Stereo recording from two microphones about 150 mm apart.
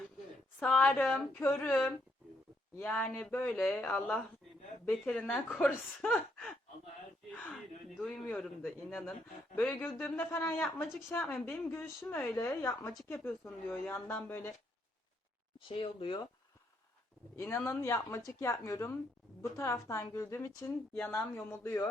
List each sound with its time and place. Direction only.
0.6 s a man's voice: 5° left (ahead or behind)
7.9 s a man's voice: 5° left (ahead or behind)
15.5 s speech: 35° left (ahead or behind)
17.3 s a woman's voice: 15° left (ahead or behind)